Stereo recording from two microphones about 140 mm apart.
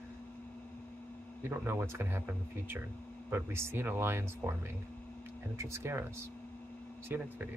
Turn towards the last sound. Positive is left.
turn(degrees=-15)  # may be behind; listen again after turning